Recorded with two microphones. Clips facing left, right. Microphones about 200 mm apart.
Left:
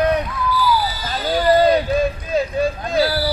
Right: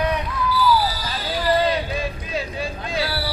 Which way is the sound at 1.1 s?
45° left (ahead or behind).